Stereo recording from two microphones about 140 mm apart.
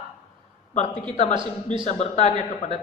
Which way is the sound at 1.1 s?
50° left (ahead or behind).